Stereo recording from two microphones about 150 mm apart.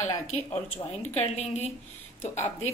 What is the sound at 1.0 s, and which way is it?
Speech, 45° left (ahead or behind).